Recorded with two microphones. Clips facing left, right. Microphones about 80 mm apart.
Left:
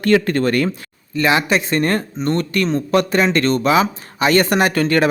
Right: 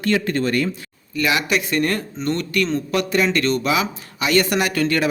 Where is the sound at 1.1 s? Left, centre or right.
Left.